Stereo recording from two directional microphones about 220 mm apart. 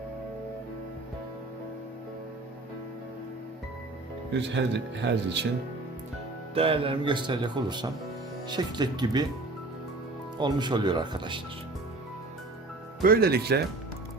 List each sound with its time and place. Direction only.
4.3 s speech: 55° right (ahead or behind)
6.5 s speech: 25° right (ahead or behind)
10.4 s speech: 20° right (ahead or behind)
13.0 s speech: 45° right (ahead or behind)